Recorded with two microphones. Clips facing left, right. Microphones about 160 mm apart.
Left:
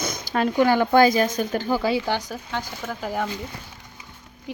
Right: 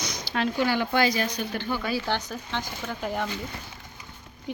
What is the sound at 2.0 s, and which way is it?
Speech, 10° left (ahead or behind).